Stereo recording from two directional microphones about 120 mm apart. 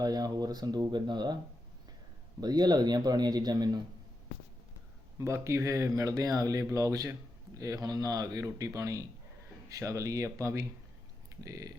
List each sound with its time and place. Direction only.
0.0 s speech: 35° right (ahead or behind)
2.4 s speech: 35° right (ahead or behind)
5.2 s speech: 25° right (ahead or behind)